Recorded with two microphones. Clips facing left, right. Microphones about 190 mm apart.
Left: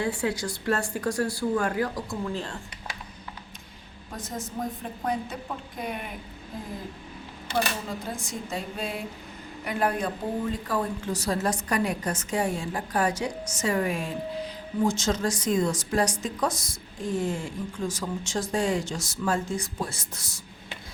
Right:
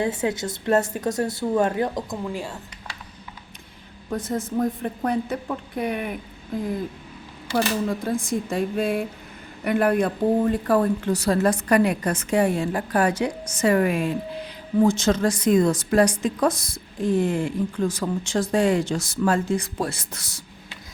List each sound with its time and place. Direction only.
0.0 s a woman's voice: 20° right (ahead or behind)
4.2 s a woman's voice: 55° right (ahead or behind)
8.1 s a woman's voice: 55° right (ahead or behind); by 20.4 s 75° right (ahead or behind)